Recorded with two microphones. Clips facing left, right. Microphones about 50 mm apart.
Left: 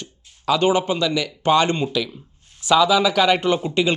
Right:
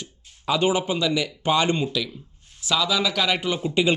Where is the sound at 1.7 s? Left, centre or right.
Centre.